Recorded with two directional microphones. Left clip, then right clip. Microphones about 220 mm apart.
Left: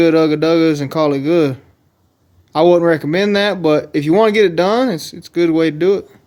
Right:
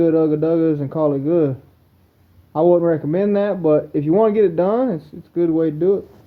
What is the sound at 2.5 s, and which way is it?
Speech, 35° left (ahead or behind).